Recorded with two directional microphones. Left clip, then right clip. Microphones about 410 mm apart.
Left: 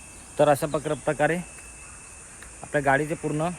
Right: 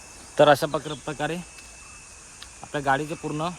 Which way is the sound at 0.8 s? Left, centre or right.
Centre.